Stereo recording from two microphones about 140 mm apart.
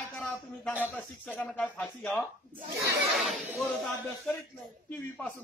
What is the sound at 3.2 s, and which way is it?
Speech, centre (ahead or behind).